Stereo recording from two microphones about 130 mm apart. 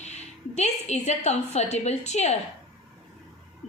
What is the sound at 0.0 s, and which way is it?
A woman's voice, 60° left (ahead or behind).